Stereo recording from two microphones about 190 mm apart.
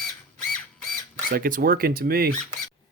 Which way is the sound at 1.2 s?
50° right (ahead or behind).